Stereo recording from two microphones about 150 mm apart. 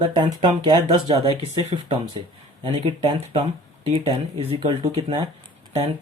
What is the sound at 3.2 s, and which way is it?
Speech, 45° right (ahead or behind).